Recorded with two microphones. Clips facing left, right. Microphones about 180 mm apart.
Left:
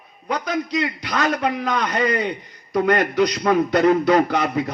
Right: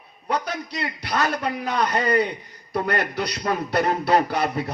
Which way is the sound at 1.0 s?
35° right (ahead or behind).